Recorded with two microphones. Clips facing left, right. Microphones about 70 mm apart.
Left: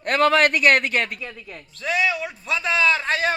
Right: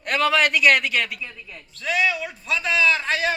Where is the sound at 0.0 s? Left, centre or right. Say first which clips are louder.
Left 3 dB; left.